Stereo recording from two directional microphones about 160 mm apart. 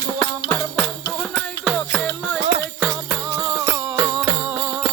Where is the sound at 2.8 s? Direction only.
15° right (ahead or behind).